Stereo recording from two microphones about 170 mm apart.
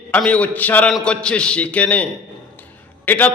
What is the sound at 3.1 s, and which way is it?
Speech, 10° left (ahead or behind).